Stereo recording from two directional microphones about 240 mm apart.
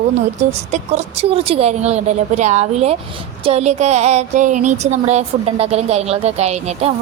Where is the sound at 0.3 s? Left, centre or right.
Right.